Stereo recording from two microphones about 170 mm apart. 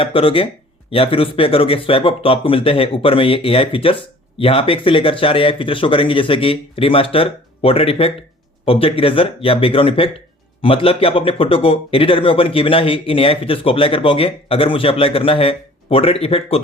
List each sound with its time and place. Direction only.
0.0 s speech: 35° left (ahead or behind)